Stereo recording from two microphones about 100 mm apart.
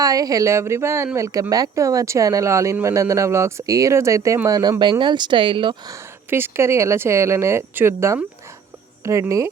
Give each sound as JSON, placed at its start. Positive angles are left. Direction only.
{"t": 0.0, "sound": "speech", "side_deg": -35}
{"t": 4.8, "sound": "speech", "side_deg": -50}
{"t": 6.3, "sound": "speech", "side_deg": -25}